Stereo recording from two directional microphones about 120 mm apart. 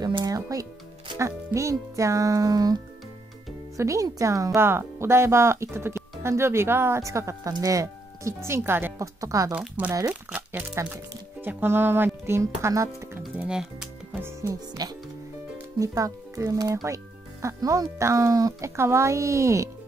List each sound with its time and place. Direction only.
0.0 s music: 35° right (ahead or behind)
1.1 s speech: 25° right (ahead or behind)
9.5 s speech: 10° right (ahead or behind)
9.8 s speech: 20° right (ahead or behind)
13.4 s speech: 5° right (ahead or behind)
14.2 s speech: 25° right (ahead or behind)